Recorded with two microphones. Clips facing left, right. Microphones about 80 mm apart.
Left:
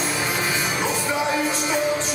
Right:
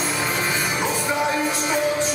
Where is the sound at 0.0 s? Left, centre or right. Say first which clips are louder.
Even; centre.